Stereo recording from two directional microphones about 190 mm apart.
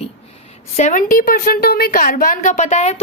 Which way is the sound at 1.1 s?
50° left (ahead or behind).